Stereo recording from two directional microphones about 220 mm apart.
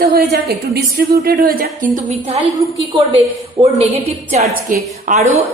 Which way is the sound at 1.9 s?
30° right (ahead or behind).